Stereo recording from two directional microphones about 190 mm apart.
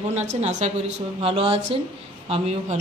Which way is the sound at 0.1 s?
35° right (ahead or behind).